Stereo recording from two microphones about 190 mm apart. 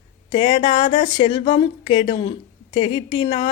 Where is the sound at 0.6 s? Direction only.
25° left (ahead or behind).